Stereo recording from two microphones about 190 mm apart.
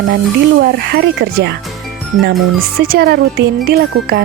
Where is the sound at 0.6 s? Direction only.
60° right (ahead or behind).